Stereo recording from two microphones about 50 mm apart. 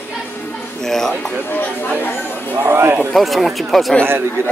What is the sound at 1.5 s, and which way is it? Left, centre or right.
Speech, left.